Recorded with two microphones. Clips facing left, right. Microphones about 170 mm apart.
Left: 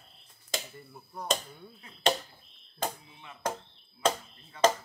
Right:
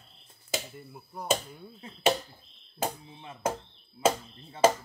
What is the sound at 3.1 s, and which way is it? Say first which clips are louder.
Speech: right 5 dB; 30° right (ahead or behind).